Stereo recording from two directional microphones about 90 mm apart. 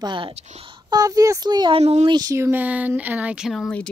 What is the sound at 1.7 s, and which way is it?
Speech, 90° right.